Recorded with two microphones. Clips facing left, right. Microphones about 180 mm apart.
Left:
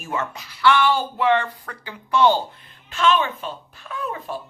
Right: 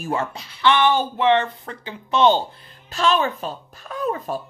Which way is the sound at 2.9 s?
35° right (ahead or behind).